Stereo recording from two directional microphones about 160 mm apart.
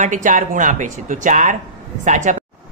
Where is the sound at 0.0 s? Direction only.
50° right (ahead or behind).